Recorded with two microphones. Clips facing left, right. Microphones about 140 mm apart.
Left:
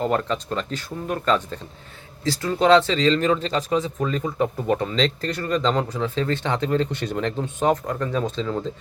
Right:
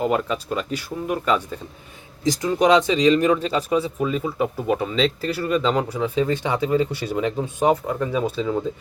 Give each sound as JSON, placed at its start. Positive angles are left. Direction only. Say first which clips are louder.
{"t": 0.0, "sound": "speech", "louder": "right 1 dB", "side_deg": -10}